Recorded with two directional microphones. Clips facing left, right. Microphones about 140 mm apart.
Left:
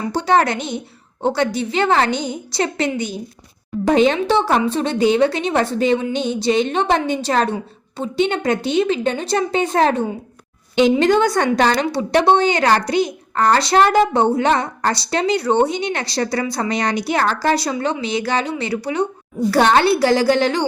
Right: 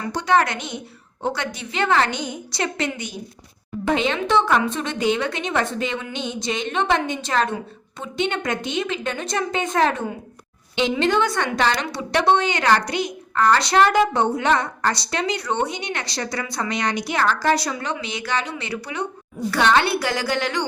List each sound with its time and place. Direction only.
0.1 s a woman's voice: 30° left (ahead or behind)